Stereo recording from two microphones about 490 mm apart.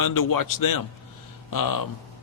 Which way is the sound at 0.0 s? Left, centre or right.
Left.